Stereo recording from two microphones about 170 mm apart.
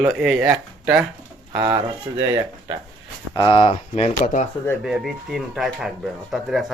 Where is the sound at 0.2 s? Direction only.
5° right (ahead or behind).